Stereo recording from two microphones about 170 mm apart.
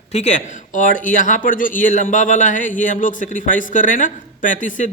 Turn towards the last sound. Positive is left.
turn(degrees=50)  # may be behind; listen again after turning